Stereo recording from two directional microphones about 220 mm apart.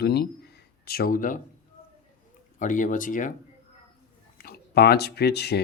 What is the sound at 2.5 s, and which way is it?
Speech, 35° left (ahead or behind).